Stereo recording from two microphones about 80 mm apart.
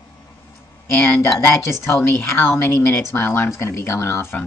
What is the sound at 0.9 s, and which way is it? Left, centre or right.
Speech, left.